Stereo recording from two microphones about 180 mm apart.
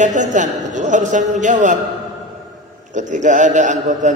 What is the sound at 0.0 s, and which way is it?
A man's voice, 45° right (ahead or behind).